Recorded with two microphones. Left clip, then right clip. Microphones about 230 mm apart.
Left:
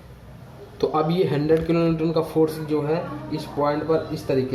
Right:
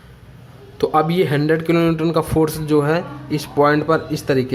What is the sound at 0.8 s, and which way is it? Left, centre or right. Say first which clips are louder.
A man's voice: right 5 dB; right.